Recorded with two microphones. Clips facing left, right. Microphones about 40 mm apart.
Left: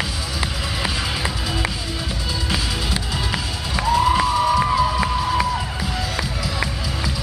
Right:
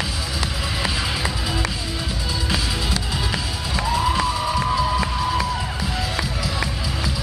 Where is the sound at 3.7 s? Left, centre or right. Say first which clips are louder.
Left 4 dB; centre.